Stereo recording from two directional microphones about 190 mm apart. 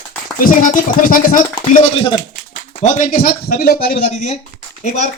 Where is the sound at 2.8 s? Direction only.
40° left (ahead or behind).